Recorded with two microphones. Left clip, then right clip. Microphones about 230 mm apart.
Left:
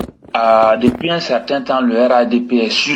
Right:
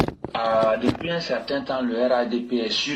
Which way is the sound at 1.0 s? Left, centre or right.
Left.